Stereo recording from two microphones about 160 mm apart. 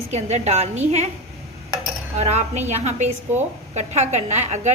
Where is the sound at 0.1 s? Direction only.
45° right (ahead or behind).